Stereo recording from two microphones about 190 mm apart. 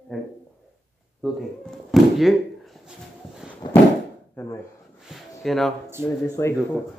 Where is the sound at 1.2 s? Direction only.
Centre (ahead or behind).